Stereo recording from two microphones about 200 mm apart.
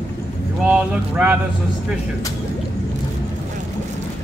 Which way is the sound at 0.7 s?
5° right (ahead or behind).